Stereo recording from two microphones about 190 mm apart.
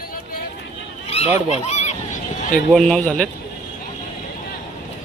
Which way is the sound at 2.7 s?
5° left (ahead or behind).